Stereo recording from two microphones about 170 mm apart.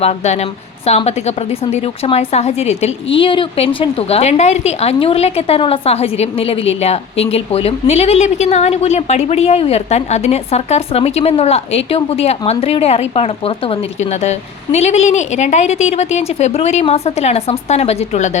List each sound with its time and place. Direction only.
0.0 s a woman's voice: 40° left (ahead or behind)